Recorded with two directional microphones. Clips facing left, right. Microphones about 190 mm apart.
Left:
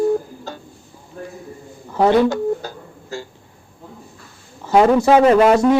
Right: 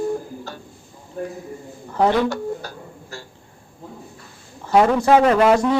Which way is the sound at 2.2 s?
20° left (ahead or behind).